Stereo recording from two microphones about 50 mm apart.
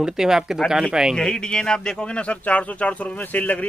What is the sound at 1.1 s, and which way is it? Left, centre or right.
A man's voice, centre.